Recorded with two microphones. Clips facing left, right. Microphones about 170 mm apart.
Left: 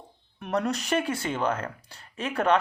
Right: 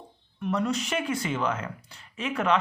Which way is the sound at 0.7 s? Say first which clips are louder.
Left 1 dB; 35° left (ahead or behind).